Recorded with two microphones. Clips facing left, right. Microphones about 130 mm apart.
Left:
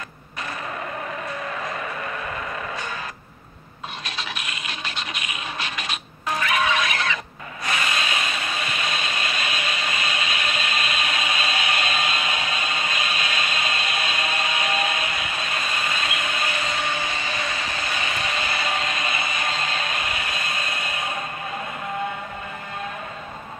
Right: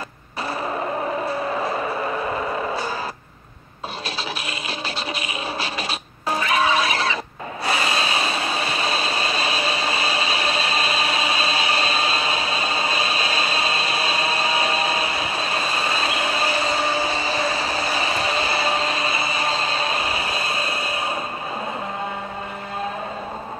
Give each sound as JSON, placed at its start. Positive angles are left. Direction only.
{"t": 1.2, "sound": "music", "side_deg": -30}
{"t": 4.2, "sound": "scratch", "side_deg": -30}
{"t": 7.6, "sound": "a sound", "side_deg": -30}